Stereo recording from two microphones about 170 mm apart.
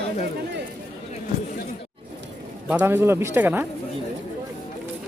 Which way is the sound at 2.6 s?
10° right (ahead or behind).